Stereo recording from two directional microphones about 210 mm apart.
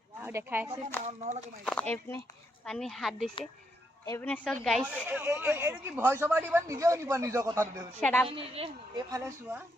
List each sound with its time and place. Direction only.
0.2 s speech: 10° right (ahead or behind)
1.0 s speech: 35° right (ahead or behind)
1.6 s a woman's voice: 5° left (ahead or behind)
4.0 s a woman's voice: 10° left (ahead or behind)
5.0 s speech: 10° right (ahead or behind)
7.6 s a woman's voice: 5° left (ahead or behind)
8.3 s speech: 25° right (ahead or behind)
9.1 s speech: 10° right (ahead or behind)